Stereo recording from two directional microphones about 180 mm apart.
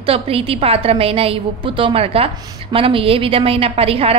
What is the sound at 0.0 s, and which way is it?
A woman's voice, 30° right (ahead or behind).